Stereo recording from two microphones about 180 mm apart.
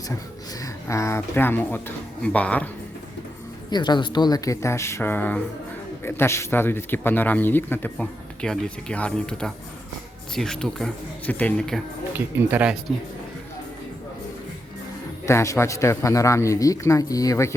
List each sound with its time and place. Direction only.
0.6 s speech: 15° left (ahead or behind)
3.7 s speech: 25° left (ahead or behind); by 11.8 s 5° left (ahead or behind)
12.5 s speech: 10° right (ahead or behind)
15.3 s speech: 15° left (ahead or behind)